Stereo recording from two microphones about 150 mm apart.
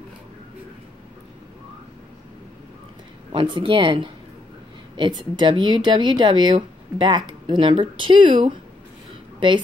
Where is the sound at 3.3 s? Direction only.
35° right (ahead or behind).